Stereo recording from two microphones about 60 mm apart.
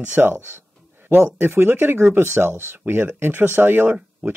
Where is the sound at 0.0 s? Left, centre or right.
Right.